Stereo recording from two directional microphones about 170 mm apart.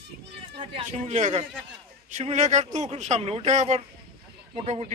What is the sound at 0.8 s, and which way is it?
Speech, 45° right (ahead or behind).